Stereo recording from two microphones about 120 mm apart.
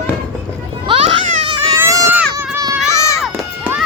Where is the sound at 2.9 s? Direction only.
25° left (ahead or behind).